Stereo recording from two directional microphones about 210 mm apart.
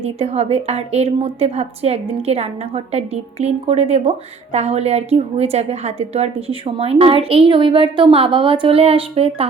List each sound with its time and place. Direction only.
0.0 s a woman's voice: 30° right (ahead or behind)